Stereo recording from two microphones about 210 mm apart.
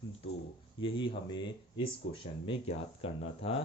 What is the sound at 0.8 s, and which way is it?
Speech, 25° left (ahead or behind).